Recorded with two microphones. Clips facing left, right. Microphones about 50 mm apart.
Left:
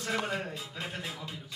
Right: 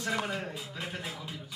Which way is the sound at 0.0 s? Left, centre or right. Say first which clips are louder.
Even; centre.